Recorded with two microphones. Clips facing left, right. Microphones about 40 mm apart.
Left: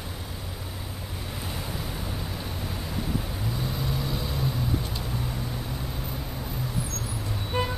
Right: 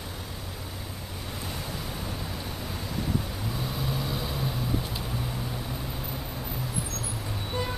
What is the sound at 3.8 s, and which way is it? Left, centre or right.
Vehicle, centre.